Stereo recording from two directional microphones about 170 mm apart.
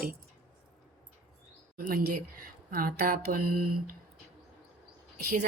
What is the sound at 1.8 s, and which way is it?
Speech, 55° right (ahead or behind).